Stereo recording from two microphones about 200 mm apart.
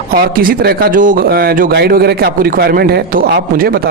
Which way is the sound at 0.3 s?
50° right (ahead or behind).